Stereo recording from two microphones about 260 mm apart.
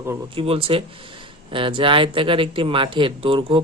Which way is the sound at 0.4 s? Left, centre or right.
Right.